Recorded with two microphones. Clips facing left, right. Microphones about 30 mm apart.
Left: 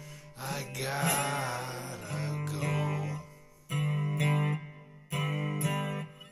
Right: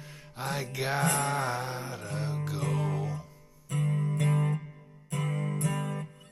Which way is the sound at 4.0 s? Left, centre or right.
Centre.